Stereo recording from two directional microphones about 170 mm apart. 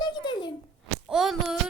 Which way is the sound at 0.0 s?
25° left (ahead or behind).